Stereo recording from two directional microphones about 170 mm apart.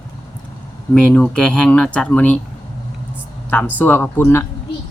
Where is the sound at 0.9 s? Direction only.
5° left (ahead or behind).